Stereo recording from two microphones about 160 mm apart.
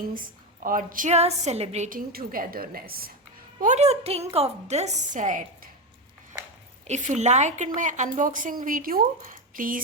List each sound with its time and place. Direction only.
0.6 s a woman's voice: 60° right (ahead or behind)
3.6 s a woman's voice: 45° right (ahead or behind)
6.8 s a woman's voice: 45° right (ahead or behind)